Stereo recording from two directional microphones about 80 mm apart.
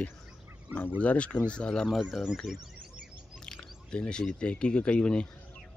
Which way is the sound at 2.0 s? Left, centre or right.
Centre.